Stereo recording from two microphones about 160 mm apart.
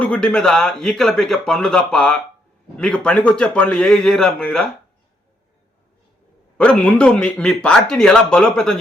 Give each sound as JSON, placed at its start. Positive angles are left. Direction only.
{"t": 0.0, "sound": "speech", "side_deg": 5}
{"t": 6.6, "sound": "speech", "side_deg": 5}